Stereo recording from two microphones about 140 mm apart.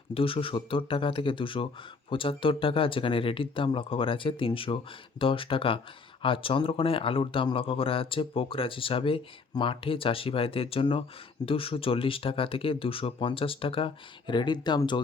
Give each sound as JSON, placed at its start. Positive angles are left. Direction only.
{"t": 0.1, "sound": "a man's voice", "side_deg": 40}